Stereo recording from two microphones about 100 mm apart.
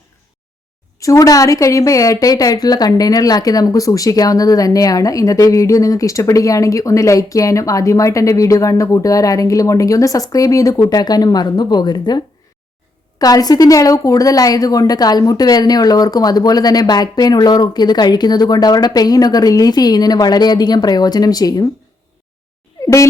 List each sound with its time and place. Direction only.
0.9 s a woman's voice: 35° left (ahead or behind)